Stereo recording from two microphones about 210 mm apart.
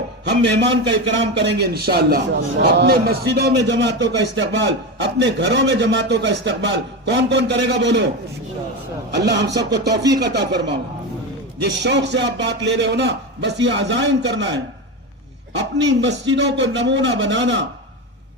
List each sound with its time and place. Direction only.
0.3 s a man's voice: 55° right (ahead or behind)
9.1 s a man's voice: 55° right (ahead or behind)